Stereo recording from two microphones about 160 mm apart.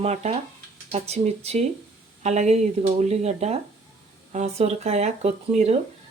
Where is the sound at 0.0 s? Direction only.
40° right (ahead or behind).